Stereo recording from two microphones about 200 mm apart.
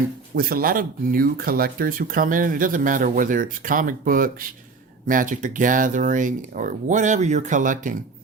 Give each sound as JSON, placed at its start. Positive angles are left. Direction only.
{"t": 0.3, "sound": "speech", "side_deg": -50}